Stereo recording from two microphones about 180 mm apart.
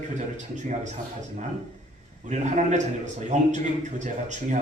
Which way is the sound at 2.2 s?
40° right (ahead or behind).